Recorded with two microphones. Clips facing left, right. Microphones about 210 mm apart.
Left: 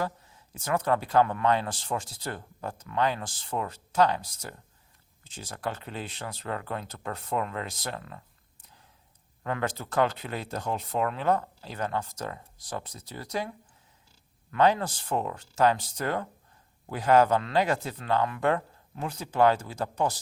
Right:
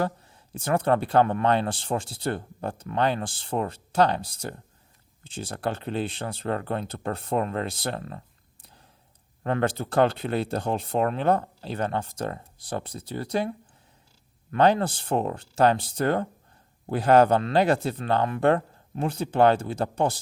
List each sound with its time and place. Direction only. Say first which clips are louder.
0.6 s speech: right 4 dB; 30° right (ahead or behind)
9.4 s speech: right 6 dB; 35° right (ahead or behind)
14.5 s speech: right 3 dB; 30° right (ahead or behind)